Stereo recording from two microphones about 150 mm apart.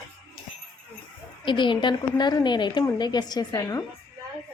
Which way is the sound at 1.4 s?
30° left (ahead or behind).